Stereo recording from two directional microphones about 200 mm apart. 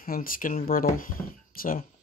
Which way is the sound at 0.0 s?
45° left (ahead or behind).